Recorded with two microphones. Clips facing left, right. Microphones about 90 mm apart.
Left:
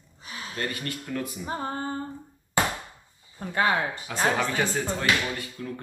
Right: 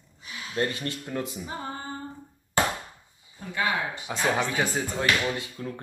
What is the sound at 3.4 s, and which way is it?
Speech, 45° left (ahead or behind).